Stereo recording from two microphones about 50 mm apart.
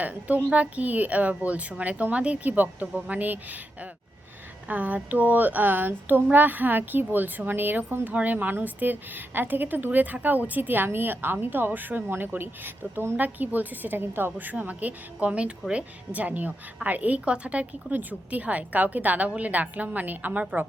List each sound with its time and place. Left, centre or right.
0.0 s a woman's voice: right
4.7 s speech: right
12.0 s a woman's voice: right